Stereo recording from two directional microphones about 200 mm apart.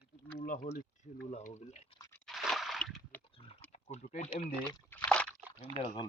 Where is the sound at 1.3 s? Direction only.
35° left (ahead or behind).